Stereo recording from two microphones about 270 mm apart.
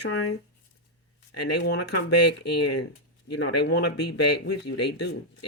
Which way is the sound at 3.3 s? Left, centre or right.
Left.